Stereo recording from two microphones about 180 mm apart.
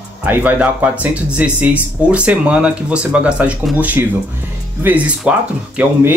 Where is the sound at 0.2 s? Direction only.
10° right (ahead or behind).